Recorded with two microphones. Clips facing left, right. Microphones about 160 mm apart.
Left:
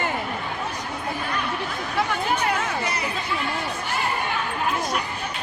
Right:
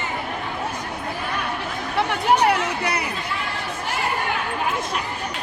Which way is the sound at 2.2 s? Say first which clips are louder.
Right 6 dB; 70° right (ahead or behind).